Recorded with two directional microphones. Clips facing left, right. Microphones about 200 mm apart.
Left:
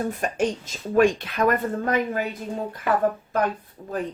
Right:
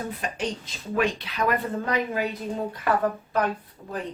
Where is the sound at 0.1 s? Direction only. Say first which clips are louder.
Left 6 dB; 45° left (ahead or behind).